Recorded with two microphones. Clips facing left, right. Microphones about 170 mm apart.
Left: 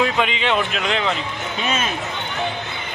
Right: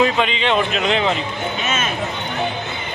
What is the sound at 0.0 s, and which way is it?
A man's voice, 10° left (ahead or behind).